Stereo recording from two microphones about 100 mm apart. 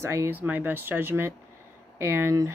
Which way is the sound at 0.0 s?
25° right (ahead or behind).